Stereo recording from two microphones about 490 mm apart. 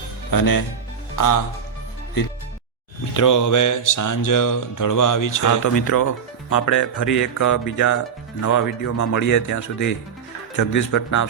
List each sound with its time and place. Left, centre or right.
0.3 s speech: left
3.2 s speech: left